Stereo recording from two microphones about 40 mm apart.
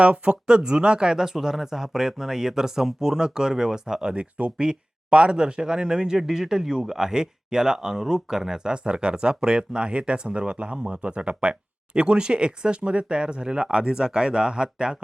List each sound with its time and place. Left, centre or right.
0.0 s speech: right